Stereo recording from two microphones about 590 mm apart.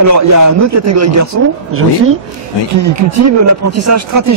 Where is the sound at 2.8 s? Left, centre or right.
Right.